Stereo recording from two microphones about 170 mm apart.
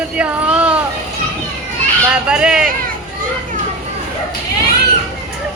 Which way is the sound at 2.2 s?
5° right (ahead or behind).